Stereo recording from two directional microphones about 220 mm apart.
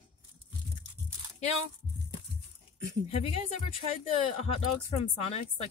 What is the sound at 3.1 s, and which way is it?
Speech, 25° left (ahead or behind).